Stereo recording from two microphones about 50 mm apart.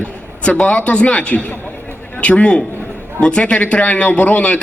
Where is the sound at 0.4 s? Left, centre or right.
Left.